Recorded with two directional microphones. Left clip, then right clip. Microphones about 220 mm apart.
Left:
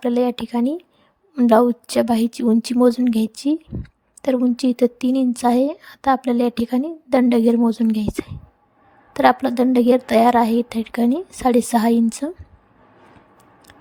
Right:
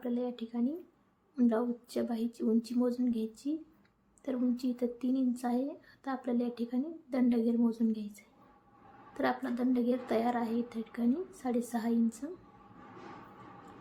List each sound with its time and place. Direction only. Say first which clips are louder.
0.0 s speech: left 17 dB; 45° left (ahead or behind)
9.1 s speech: left 18 dB; 45° left (ahead or behind)